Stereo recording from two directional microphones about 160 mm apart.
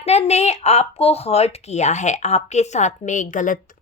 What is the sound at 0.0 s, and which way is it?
Speech, 45° left (ahead or behind).